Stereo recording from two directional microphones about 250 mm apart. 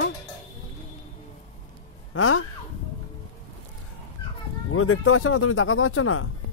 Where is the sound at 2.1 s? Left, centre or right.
Left.